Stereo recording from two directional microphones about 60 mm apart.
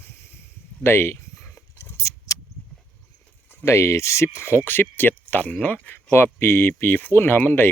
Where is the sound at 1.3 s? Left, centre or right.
Left.